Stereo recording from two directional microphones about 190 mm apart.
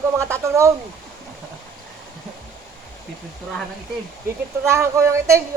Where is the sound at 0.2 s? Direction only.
15° right (ahead or behind).